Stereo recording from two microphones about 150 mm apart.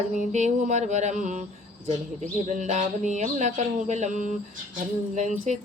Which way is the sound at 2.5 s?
55° right (ahead or behind).